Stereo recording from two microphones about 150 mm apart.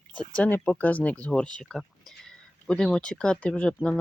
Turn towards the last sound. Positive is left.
turn(degrees=5)  # may be behind; listen again after turning